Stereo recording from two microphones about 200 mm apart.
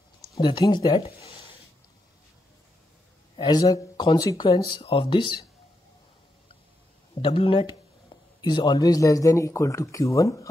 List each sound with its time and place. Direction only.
0.4 s speech: 20° left (ahead or behind)
3.3 s speech: 20° left (ahead or behind)
7.2 s a man's voice: 25° left (ahead or behind)